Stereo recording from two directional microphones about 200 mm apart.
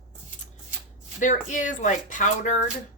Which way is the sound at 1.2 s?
40° left (ahead or behind).